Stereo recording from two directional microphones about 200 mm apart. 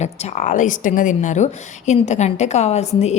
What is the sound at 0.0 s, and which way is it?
A woman's voice, 35° left (ahead or behind).